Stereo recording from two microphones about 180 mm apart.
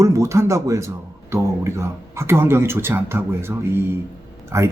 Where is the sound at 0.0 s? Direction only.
15° right (ahead or behind).